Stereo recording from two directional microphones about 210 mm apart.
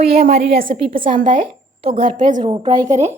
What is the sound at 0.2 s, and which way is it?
A woman's voice, 30° right (ahead or behind).